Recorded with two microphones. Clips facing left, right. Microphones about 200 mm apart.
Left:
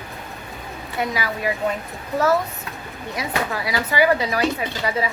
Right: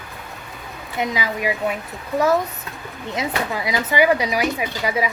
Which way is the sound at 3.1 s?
20° right (ahead or behind).